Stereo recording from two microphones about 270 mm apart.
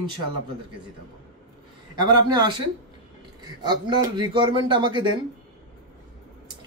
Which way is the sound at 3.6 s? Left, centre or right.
Centre.